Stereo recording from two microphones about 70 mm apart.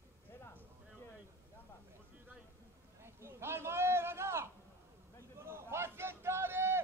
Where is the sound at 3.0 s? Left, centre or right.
Right.